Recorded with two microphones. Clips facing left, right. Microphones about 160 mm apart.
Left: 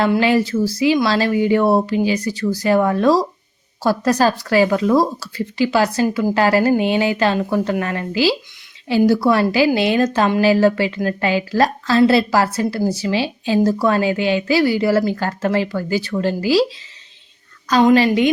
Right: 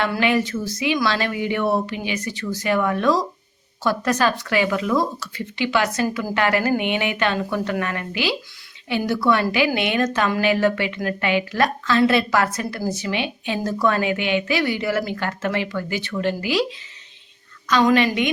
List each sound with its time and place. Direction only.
0.1 s a woman's voice: 30° left (ahead or behind)